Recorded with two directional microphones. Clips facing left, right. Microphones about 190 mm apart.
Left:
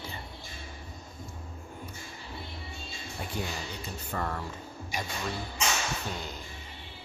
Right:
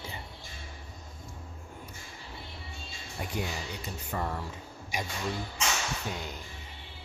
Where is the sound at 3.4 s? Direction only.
15° right (ahead or behind).